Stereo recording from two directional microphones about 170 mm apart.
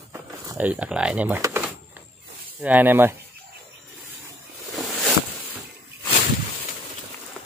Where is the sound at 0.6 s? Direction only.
10° right (ahead or behind).